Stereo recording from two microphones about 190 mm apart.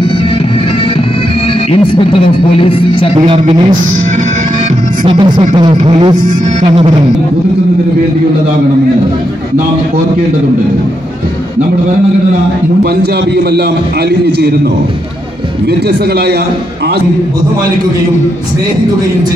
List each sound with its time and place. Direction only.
2.6 s speech: 25° left (ahead or behind)
3.2 s speech: 25° right (ahead or behind)
5.0 s speech: 25° right (ahead or behind)